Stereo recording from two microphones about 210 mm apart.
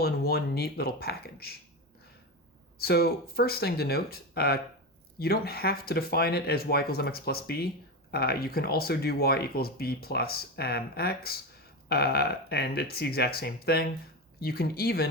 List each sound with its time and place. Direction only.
0.0 s speech: 50° left (ahead or behind)
2.7 s speech: 50° left (ahead or behind)